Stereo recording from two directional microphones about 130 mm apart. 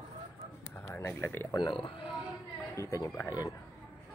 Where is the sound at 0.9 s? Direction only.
20° left (ahead or behind).